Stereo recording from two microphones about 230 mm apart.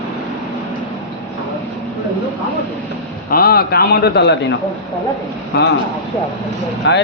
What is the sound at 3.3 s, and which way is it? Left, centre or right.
Speech, left.